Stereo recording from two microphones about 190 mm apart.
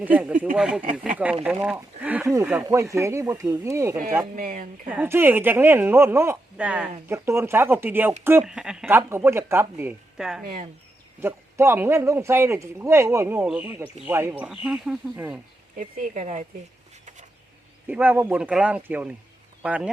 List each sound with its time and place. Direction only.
0.0 s a man's voice: 5° right (ahead or behind)
4.4 s speech: 45° right (ahead or behind)
4.9 s a man's voice: 10° right (ahead or behind)
10.4 s speech: 45° right (ahead or behind)
11.2 s a man's voice: 10° right (ahead or behind)
15.8 s speech: 45° right (ahead or behind)
17.8 s a man's voice: 10° right (ahead or behind)